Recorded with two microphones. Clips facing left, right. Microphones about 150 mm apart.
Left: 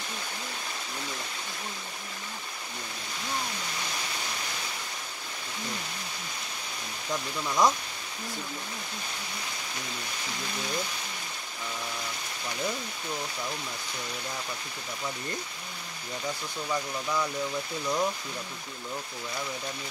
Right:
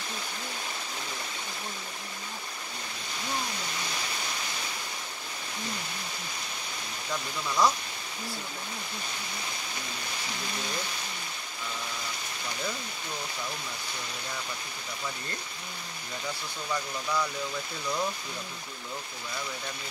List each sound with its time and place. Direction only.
7.4 s speech: 20° left (ahead or behind)